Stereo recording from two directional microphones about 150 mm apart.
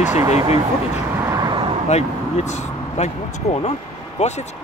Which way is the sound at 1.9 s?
45° left (ahead or behind).